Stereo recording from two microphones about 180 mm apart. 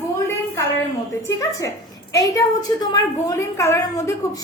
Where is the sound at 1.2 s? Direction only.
15° left (ahead or behind).